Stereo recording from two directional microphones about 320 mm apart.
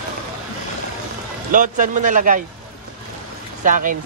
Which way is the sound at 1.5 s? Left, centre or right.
Right.